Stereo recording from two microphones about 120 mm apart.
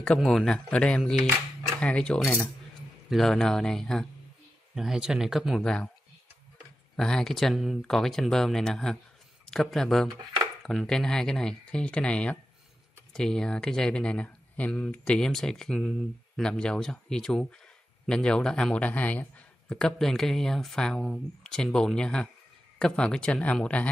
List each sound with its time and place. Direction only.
0.0 s a man's voice: 5° left (ahead or behind)
7.0 s a man's voice: 5° left (ahead or behind)